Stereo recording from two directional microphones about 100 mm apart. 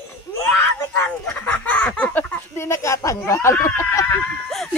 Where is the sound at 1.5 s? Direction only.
15° left (ahead or behind).